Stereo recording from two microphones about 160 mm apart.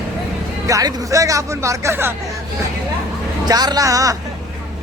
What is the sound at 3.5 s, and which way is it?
Speech, 25° right (ahead or behind).